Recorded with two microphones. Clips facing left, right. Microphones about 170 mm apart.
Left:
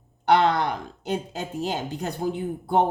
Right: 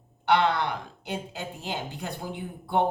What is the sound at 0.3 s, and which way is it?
Speech, 45° left (ahead or behind).